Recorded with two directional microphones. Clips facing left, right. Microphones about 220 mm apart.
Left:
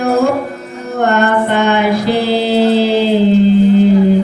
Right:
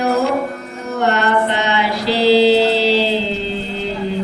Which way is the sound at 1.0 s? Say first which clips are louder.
Left 4 dB; 50° left (ahead or behind).